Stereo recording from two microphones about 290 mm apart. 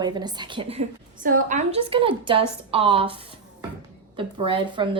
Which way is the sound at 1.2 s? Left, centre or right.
Right.